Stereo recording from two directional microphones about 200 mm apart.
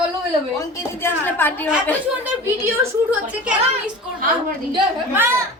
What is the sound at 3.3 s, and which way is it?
Speech, 5° right (ahead or behind).